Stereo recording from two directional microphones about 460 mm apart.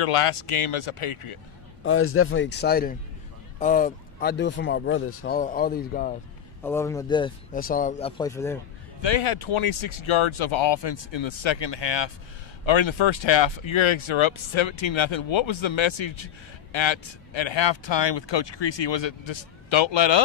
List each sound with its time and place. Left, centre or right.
0.0 s speech: left
1.9 s speech: left
6.6 s speech: centre
9.0 s speech: left